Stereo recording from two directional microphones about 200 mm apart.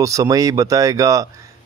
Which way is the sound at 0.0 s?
15° right (ahead or behind).